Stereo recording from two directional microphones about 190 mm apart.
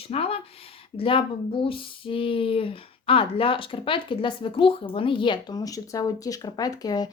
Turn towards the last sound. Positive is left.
turn(degrees=20)  # may be behind; listen again after turning